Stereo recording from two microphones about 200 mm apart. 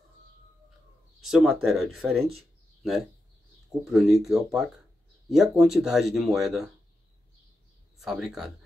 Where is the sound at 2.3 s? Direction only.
Centre (ahead or behind).